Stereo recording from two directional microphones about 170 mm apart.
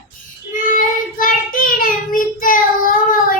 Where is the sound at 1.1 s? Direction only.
55° left (ahead or behind).